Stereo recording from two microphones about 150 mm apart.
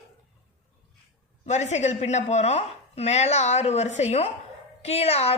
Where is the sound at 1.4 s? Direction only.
50° left (ahead or behind).